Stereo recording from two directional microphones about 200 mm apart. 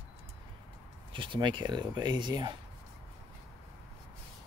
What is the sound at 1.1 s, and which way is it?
Speech, 25° right (ahead or behind).